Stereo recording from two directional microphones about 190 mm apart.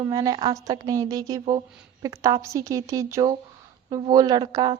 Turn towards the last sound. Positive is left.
turn(degrees=-25)  # may be behind; listen again after turning